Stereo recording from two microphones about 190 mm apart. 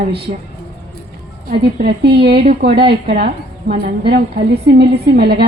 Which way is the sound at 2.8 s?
30° right (ahead or behind).